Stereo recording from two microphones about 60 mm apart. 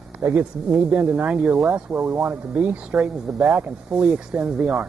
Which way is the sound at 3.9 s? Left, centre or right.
Centre.